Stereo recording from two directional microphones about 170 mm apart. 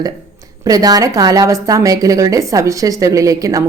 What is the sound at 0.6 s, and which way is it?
A woman's voice, 20° right (ahead or behind).